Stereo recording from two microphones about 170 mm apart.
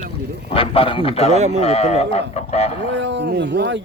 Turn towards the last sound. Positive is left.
turn(degrees=-90)